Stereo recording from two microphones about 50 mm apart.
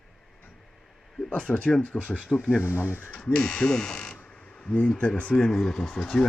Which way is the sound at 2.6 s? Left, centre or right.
Left.